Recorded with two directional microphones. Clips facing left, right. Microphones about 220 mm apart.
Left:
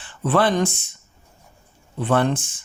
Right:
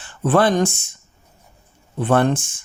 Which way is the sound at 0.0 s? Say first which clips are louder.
Right 3 dB; 45° right (ahead or behind).